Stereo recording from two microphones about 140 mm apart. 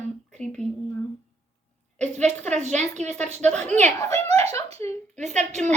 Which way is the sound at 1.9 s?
55° right (ahead or behind).